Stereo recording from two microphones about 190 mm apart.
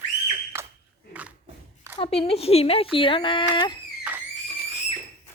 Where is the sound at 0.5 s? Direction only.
15° right (ahead or behind).